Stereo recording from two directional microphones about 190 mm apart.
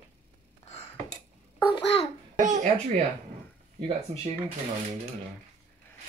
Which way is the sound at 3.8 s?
30° right (ahead or behind).